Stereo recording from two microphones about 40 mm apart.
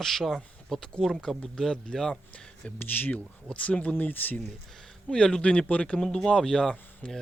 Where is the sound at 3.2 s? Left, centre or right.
Left.